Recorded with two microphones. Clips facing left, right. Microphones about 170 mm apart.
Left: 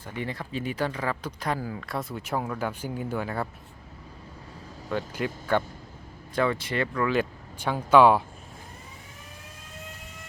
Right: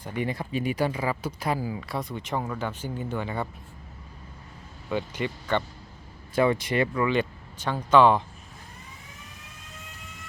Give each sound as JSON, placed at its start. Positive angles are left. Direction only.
{"t": 0.0, "sound": "speech", "side_deg": -15}
{"t": 2.0, "sound": "speech", "side_deg": 5}
{"t": 4.9, "sound": "speech", "side_deg": 0}
{"t": 6.3, "sound": "speech", "side_deg": -15}
{"t": 7.1, "sound": "speech", "side_deg": 5}